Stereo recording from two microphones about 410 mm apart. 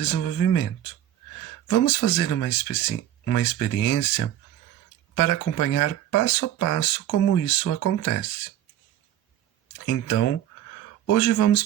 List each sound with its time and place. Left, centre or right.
0.0 s speech: left
1.7 s speech: left
9.8 s speech: left